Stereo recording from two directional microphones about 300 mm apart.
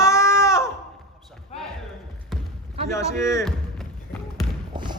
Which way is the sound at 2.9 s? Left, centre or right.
Centre.